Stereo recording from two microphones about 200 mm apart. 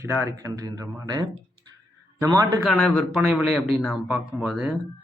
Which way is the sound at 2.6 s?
Centre (ahead or behind).